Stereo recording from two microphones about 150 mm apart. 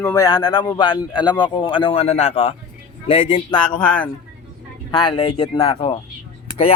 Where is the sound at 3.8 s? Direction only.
10° left (ahead or behind).